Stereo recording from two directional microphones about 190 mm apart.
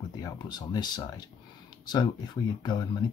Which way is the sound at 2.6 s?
20° left (ahead or behind).